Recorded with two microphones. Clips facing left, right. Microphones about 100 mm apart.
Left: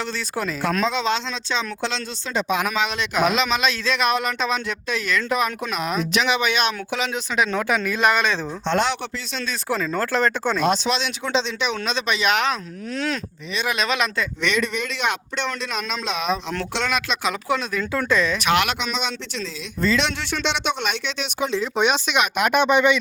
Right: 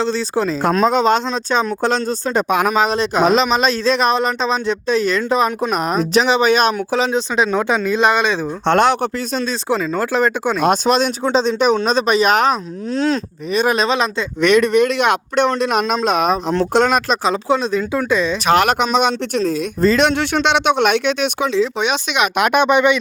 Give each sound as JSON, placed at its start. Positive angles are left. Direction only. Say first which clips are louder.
{"t": 0.0, "sound": "speech", "louder": "right 8 dB", "side_deg": -30}
{"t": 0.9, "sound": "speech", "louder": "right 8 dB", "side_deg": -45}
{"t": 5.7, "sound": "speech", "louder": "right 7 dB", "side_deg": -40}
{"t": 8.6, "sound": "speech", "louder": "right 8 dB", "side_deg": -55}
{"t": 9.4, "sound": "speech", "louder": "right 4 dB", "side_deg": -25}
{"t": 10.6, "sound": "speech", "louder": "right 8 dB", "side_deg": -50}
{"t": 13.5, "sound": "speech", "louder": "right 8 dB", "side_deg": -45}
{"t": 14.4, "sound": "speech", "louder": "right 13 dB", "side_deg": -55}
{"t": 17.2, "sound": "speech", "louder": "right 7 dB", "side_deg": -30}
{"t": 18.4, "sound": "speech", "louder": "right 7 dB", "side_deg": -40}
{"t": 21.8, "sound": "speech", "louder": "right 1 dB", "side_deg": -15}
{"t": 22.2, "sound": "speech", "louder": "right 6 dB", "side_deg": -70}